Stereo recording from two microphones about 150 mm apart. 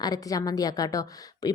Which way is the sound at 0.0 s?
25° left (ahead or behind).